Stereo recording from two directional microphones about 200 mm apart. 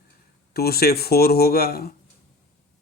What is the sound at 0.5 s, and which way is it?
Speech, 50° left (ahead or behind).